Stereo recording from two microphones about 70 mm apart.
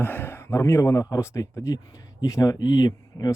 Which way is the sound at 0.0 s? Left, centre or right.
Left.